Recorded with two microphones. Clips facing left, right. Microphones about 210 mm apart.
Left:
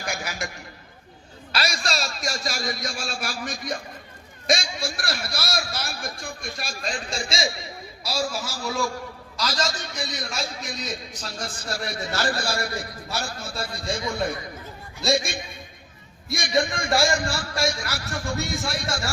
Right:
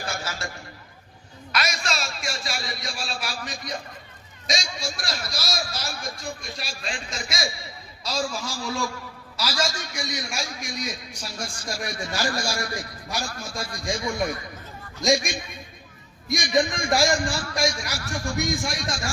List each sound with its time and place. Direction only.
0.1 s a sound: 15° left (ahead or behind)
1.5 s a man's voice: 30° left (ahead or behind)
8.0 s a man's voice: 10° left (ahead or behind)
9.4 s a man's voice: 10° right (ahead or behind)
15.0 s a man's voice: 15° right (ahead or behind)